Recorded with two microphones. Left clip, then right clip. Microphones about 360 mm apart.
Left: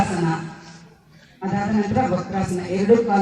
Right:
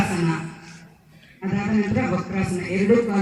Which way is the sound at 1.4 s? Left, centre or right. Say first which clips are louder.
Left 2 dB; left.